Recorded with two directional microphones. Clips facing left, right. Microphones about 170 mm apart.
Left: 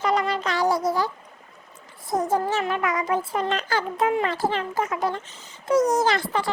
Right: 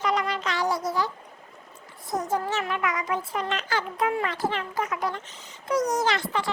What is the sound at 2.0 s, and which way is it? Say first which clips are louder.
Speech: left 4 dB; 30° left (ahead or behind).